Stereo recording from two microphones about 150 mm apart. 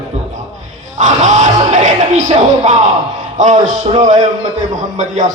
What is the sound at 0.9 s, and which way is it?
Music, 55° right (ahead or behind).